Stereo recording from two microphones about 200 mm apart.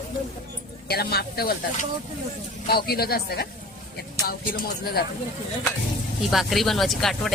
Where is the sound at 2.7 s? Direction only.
50° left (ahead or behind).